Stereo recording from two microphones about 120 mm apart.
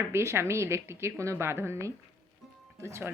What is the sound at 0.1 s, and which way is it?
A woman's voice, 20° right (ahead or behind).